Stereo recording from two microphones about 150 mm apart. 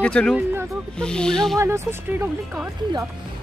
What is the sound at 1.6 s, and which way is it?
Speech, 15° right (ahead or behind).